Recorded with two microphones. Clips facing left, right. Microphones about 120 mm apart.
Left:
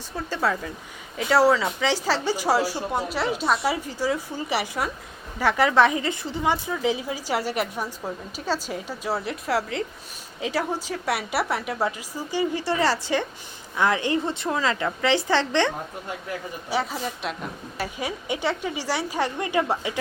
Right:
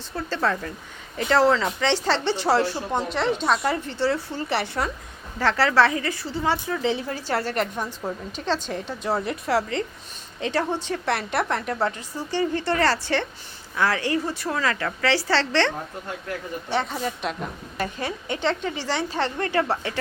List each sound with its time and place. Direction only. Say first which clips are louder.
0.2 s a woman's voice: right 1 dB; 10° left (ahead or behind)
16.6 s a woman's voice: right 1 dB; 5° left (ahead or behind)